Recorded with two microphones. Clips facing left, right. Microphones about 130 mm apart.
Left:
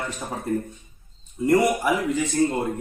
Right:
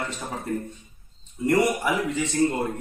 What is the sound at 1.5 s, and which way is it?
A man's voice, centre (ahead or behind).